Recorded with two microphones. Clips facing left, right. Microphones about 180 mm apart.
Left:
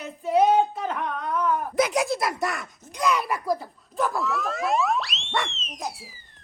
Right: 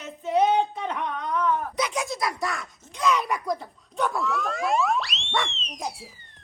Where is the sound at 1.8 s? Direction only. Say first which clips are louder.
Left 6 dB; 40° left (ahead or behind).